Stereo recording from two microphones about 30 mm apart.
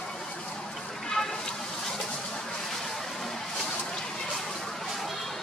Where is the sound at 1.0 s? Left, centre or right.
Centre.